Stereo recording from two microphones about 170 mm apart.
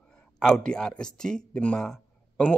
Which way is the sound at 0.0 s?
5° left (ahead or behind).